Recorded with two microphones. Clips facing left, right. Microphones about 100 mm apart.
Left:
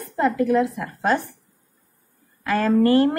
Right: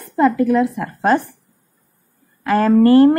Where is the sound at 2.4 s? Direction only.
40° right (ahead or behind).